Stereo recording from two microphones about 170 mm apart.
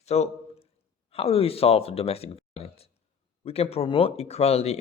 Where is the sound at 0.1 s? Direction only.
40° left (ahead or behind).